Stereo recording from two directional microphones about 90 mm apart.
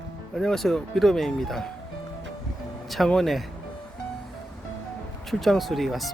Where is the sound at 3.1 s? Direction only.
Centre (ahead or behind).